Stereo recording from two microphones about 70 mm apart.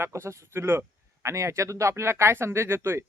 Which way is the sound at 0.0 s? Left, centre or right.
Right.